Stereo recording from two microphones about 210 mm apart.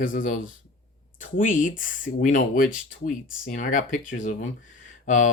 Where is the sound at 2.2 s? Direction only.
40° left (ahead or behind).